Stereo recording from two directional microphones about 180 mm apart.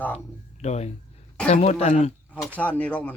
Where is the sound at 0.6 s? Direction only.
40° left (ahead or behind).